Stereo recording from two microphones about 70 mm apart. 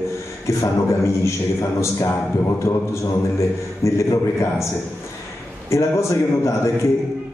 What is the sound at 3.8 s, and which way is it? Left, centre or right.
Speech, left.